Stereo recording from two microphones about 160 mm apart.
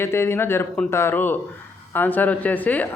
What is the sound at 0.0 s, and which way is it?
Speech, 15° left (ahead or behind).